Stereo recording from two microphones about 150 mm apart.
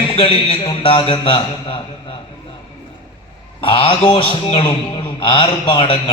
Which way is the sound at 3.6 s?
35° left (ahead or behind).